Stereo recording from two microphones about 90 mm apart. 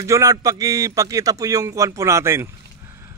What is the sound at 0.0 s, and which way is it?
A man's voice, 35° right (ahead or behind).